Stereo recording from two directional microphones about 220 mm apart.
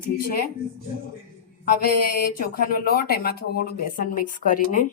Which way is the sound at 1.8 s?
45° left (ahead or behind).